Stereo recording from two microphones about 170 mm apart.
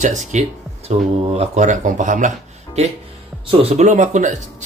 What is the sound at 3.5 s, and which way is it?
Speech, 40° right (ahead or behind).